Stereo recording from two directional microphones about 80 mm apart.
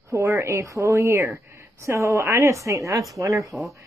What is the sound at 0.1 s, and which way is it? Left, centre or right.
A woman's voice, right.